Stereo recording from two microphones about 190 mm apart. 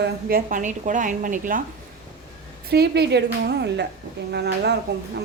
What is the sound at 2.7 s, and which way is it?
A woman's voice, 60° right (ahead or behind).